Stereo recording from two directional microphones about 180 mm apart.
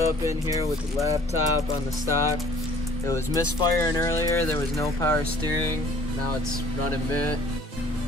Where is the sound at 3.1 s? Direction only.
15° left (ahead or behind).